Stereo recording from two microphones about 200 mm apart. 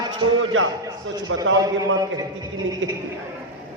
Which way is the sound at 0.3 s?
90° right.